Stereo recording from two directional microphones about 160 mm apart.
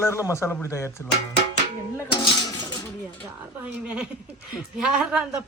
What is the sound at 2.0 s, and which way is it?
Cutlery, 25° left (ahead or behind).